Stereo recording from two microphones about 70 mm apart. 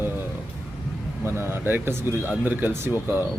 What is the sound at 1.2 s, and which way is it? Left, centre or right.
Speech, right.